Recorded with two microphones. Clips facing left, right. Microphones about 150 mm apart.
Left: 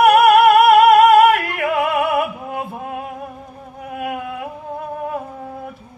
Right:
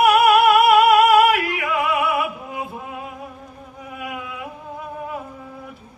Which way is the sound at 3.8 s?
55° left (ahead or behind).